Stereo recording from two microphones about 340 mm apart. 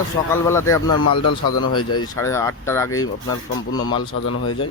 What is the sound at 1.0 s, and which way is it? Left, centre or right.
A man's voice, left.